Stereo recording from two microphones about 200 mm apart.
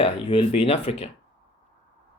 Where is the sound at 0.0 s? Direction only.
25° left (ahead or behind).